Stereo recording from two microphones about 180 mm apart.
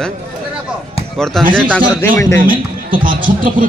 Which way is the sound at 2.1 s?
15° left (ahead or behind).